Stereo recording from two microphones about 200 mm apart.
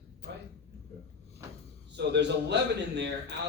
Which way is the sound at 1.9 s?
60° right (ahead or behind).